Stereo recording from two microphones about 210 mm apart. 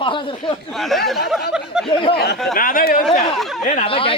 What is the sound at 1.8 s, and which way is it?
Speech, 25° left (ahead or behind).